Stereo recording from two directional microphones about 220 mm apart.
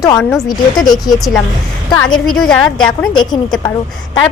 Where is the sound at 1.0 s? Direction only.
Centre (ahead or behind).